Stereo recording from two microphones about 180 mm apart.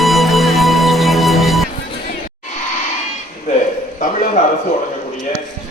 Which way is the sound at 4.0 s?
50° left (ahead or behind).